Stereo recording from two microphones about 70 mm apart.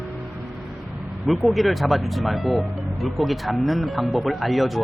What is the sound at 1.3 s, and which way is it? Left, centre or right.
Speech, centre.